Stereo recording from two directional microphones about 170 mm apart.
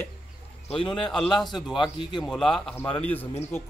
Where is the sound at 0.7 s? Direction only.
30° left (ahead or behind).